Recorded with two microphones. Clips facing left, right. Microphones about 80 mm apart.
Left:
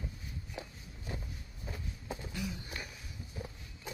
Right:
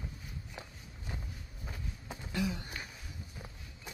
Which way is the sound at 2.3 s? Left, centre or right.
Right.